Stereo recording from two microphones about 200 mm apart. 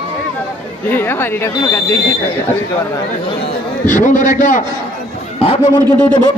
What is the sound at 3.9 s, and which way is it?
Speech, 40° left (ahead or behind).